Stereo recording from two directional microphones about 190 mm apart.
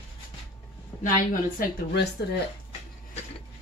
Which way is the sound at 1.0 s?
45° left (ahead or behind).